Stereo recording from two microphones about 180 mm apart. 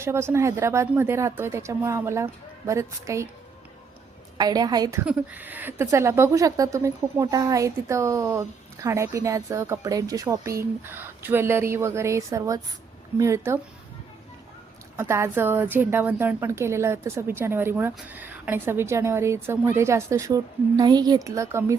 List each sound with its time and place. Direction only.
0.0 s a woman's voice: 15° right (ahead or behind)
4.4 s a woman's voice: 20° right (ahead or behind)
14.9 s a woman's voice: 15° right (ahead or behind)